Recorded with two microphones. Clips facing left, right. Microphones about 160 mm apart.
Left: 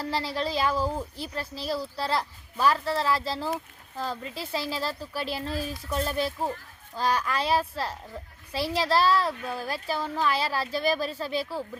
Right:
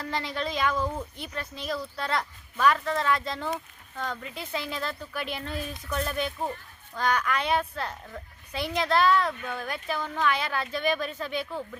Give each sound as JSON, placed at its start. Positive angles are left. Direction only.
{"t": 0.0, "sound": "speech", "side_deg": 35}